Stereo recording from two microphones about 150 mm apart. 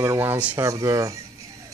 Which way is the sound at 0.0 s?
20° right (ahead or behind).